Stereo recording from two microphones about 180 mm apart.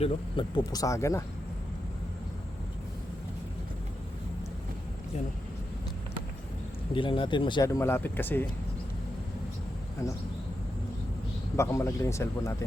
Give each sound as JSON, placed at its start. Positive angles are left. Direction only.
{"t": 0.0, "sound": "speech", "side_deg": 25}
{"t": 6.9, "sound": "speech", "side_deg": 30}
{"t": 10.0, "sound": "speech", "side_deg": 15}
{"t": 11.5, "sound": "speech", "side_deg": 15}